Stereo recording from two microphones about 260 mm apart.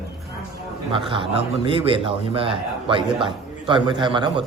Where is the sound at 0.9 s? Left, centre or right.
Centre.